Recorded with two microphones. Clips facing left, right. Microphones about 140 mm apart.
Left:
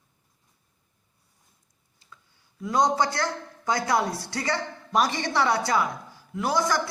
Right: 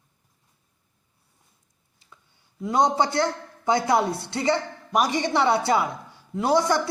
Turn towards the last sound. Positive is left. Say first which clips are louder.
# right 4 dB
turn(degrees=-25)  # may be behind; listen again after turning